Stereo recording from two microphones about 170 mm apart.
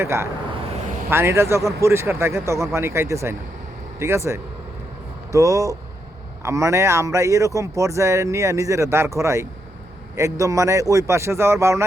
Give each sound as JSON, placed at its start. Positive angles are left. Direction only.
{"t": 0.0, "sound": "speech", "side_deg": -15}